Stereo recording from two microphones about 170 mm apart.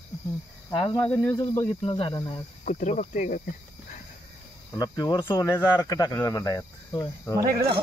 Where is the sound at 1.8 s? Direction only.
30° left (ahead or behind).